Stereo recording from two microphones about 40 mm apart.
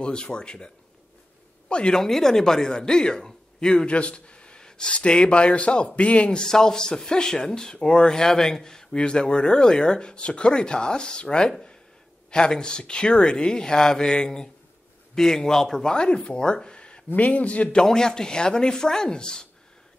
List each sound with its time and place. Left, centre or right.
0.0 s speech: left
1.7 s speech: left
2.0 s speech: centre; by 6.4 s left
6.4 s speech: centre
8.9 s speech: left
17.1 s a man's voice: left
17.8 s speech: centre